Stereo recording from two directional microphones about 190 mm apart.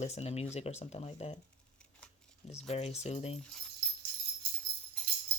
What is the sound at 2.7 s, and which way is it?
Speech, 35° left (ahead or behind).